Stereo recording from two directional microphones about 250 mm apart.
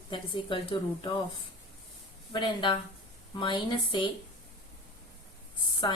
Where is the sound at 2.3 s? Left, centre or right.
Centre.